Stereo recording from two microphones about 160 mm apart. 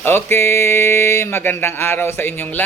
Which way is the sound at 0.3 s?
15° left (ahead or behind).